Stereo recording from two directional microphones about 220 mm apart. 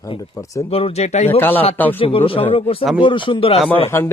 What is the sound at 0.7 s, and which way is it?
Speech, 25° left (ahead or behind).